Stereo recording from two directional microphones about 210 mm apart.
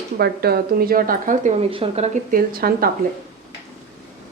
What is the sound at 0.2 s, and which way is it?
A woman's voice, 50° right (ahead or behind).